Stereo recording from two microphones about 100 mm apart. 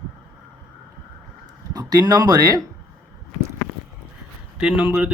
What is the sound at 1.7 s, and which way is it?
Speech, 40° right (ahead or behind).